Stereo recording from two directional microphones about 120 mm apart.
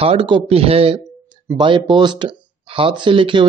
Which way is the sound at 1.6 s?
40° right (ahead or behind).